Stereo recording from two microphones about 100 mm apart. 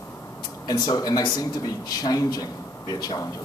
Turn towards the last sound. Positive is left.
turn(degrees=40)  # may be behind; listen again after turning